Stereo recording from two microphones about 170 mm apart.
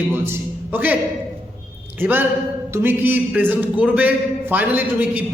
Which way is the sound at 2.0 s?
10° right (ahead or behind).